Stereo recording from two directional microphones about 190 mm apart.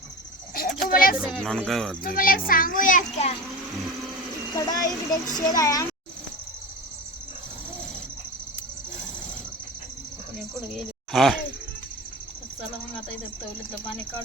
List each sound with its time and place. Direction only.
0.5 s a sound: 50° left (ahead or behind)
1.2 s speech: centre (ahead or behind)
2.0 s a child's voice: 50° left (ahead or behind)
4.5 s a child's voice: 20° left (ahead or behind)
11.1 s speech: centre (ahead or behind)